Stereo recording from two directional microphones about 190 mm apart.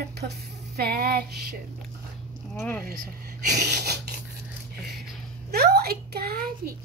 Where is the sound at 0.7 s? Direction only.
55° right (ahead or behind).